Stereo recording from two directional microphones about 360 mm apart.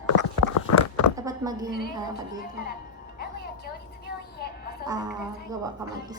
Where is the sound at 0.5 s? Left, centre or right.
Left.